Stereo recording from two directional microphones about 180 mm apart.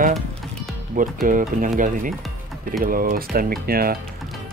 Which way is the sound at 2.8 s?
50° right (ahead or behind).